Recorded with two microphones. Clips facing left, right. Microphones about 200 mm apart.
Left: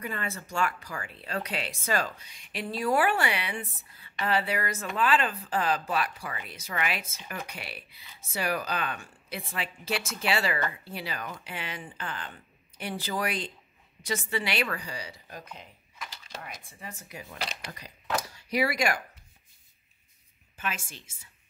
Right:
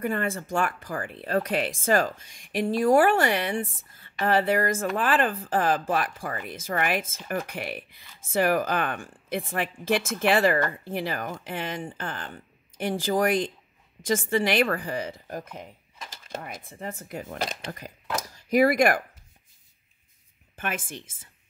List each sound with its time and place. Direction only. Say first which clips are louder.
0.0 s a woman's voice: right 8 dB; 50° right (ahead or behind)
20.5 s a woman's voice: right 4 dB; 55° right (ahead or behind)